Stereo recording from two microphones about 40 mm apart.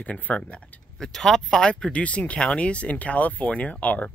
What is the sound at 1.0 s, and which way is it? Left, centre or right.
Speech, centre.